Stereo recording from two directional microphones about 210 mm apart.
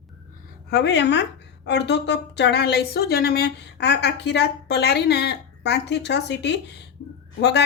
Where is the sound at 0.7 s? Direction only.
55° left (ahead or behind).